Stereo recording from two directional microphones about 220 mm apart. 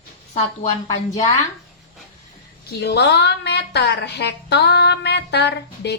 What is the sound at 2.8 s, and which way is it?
A woman's voice, 50° left (ahead or behind).